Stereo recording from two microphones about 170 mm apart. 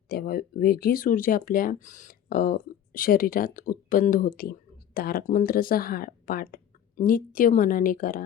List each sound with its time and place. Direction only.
0.1 s speech: 60° left (ahead or behind)